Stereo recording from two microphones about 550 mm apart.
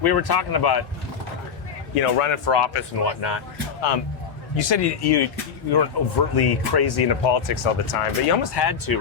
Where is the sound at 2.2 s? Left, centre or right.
Left.